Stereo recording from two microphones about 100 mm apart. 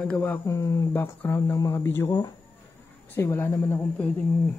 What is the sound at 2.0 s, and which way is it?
Speech, 40° left (ahead or behind).